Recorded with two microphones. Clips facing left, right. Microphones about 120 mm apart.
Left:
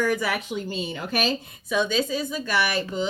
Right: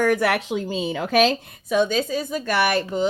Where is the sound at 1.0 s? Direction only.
90° right.